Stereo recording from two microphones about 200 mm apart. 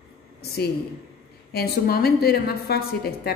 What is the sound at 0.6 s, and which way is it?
A woman's voice, 55° left (ahead or behind).